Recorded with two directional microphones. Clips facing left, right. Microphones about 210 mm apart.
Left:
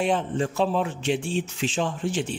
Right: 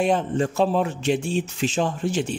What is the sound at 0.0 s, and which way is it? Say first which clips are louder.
Speech: right 3 dB; 40° right (ahead or behind).